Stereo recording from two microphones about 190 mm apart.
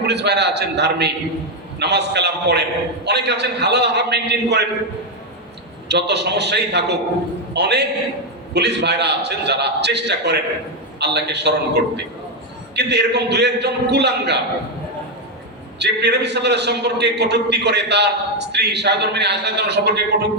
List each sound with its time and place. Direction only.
0.0 s a man's voice: 60° right (ahead or behind)
5.9 s a man's voice: 65° right (ahead or behind)
15.8 s a man's voice: 65° right (ahead or behind)